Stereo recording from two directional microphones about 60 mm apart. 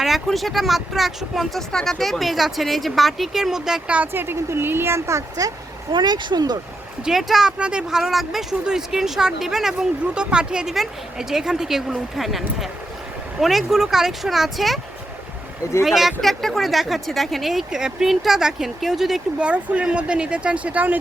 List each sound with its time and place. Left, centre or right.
0.0 s speech: centre
3.8 s speech: right
4.1 s speech: right
7.0 s speech: centre
7.6 s speech: centre
15.8 s speech: centre
19.4 s speech: centre